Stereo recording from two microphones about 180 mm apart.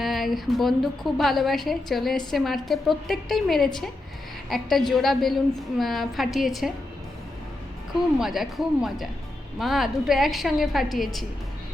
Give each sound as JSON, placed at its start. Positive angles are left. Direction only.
{"t": 0.0, "sound": "a woman's voice", "side_deg": 0}
{"t": 8.2, "sound": "a woman's voice", "side_deg": 0}